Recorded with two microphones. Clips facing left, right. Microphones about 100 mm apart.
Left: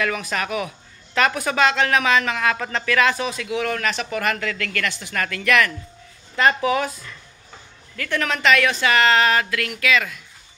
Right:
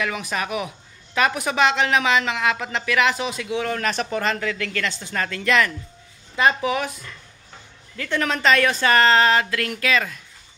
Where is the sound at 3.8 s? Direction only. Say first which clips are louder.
Even; 35° right (ahead or behind).